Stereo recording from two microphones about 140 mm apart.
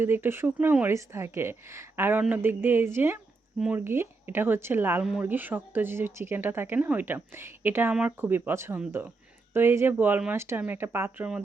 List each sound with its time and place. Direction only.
0.0 s speech: 15° right (ahead or behind)